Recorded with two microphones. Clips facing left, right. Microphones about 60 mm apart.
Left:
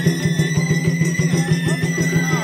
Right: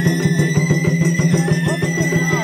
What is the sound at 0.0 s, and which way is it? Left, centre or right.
Music, right.